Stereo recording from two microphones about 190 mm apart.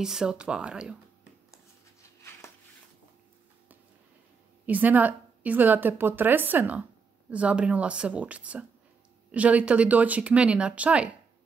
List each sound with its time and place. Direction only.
0.0 s speech: 5° right (ahead or behind)
4.6 s a woman's voice: 10° right (ahead or behind)